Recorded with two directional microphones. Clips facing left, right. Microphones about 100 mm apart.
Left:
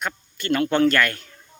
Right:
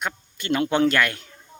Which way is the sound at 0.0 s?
15° right (ahead or behind).